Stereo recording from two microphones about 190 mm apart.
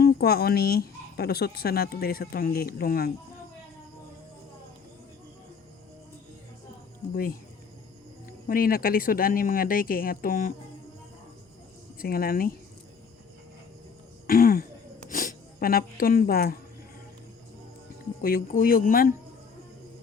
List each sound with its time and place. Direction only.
0.0 s speech: 55° left (ahead or behind)
8.3 s speech: 50° left (ahead or behind)
11.9 s speech: 50° left (ahead or behind)
14.3 s throat clearing: 50° left (ahead or behind)
15.1 s speech: 45° left (ahead or behind)
18.2 s speech: 50° left (ahead or behind)